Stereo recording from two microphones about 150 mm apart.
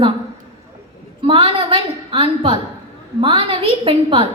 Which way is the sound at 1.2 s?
35° right (ahead or behind).